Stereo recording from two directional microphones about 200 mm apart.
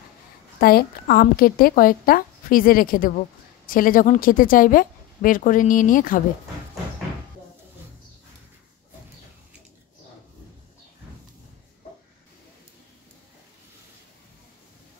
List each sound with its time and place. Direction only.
0.6 s a woman's voice: 50° left (ahead or behind)